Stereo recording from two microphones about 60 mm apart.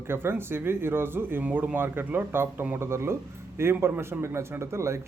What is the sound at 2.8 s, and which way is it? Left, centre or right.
A man's voice, right.